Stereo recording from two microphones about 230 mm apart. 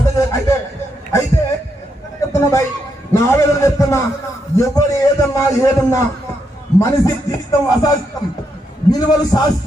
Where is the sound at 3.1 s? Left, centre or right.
Centre.